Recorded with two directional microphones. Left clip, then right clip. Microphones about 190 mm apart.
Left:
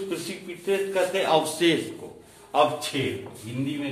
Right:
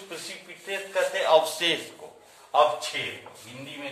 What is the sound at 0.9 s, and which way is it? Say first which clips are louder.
Speech: right 3 dB; 5° right (ahead or behind).